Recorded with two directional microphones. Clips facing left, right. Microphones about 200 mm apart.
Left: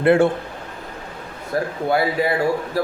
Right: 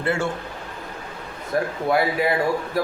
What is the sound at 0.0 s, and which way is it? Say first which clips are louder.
Speech: left 10 dB; 55° left (ahead or behind).